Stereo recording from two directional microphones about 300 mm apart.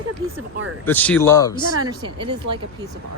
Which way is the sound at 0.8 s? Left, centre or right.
Centre.